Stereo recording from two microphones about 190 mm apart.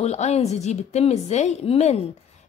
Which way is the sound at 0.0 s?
35° left (ahead or behind).